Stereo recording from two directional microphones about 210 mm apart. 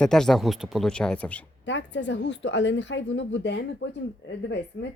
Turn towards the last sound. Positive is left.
turn(degrees=60)  # may be behind; listen again after turning